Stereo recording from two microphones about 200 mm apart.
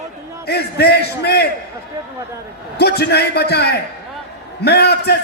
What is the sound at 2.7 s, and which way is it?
A man's voice, 55° left (ahead or behind).